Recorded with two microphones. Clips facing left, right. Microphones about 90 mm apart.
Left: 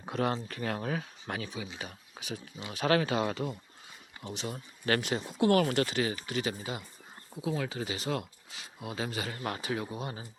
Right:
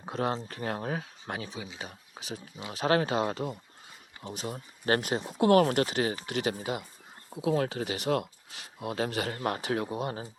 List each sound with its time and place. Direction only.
0.0 s speech: 30° right (ahead or behind)
4.4 s speech: 35° right (ahead or behind)
6.2 s speech: 55° right (ahead or behind)
9.6 s speech: 65° right (ahead or behind)